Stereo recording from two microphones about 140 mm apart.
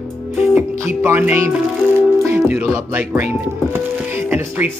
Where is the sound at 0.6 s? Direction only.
15° right (ahead or behind).